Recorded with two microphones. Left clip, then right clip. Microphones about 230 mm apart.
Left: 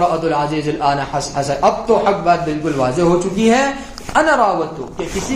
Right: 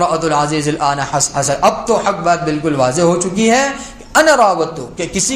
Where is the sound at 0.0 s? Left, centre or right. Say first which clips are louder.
Right 2 dB; right.